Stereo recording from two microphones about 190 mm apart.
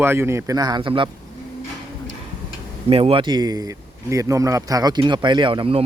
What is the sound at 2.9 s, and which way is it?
Speech, 30° right (ahead or behind).